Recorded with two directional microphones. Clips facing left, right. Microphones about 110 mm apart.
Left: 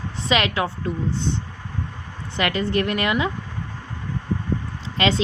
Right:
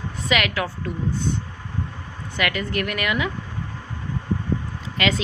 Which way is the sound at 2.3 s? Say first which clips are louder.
Left 3 dB; 30° left (ahead or behind).